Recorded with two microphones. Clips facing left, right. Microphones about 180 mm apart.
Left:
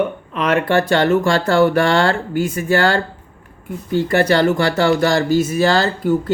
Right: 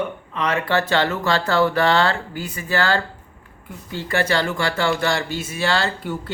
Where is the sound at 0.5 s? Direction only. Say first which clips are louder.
Left 5 dB; 50° left (ahead or behind).